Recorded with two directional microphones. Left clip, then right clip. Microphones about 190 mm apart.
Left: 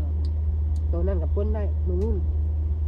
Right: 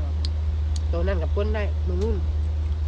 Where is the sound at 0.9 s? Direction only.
45° left (ahead or behind).